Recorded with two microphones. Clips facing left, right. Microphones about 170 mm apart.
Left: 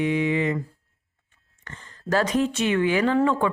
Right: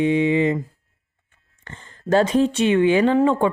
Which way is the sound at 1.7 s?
25° right (ahead or behind).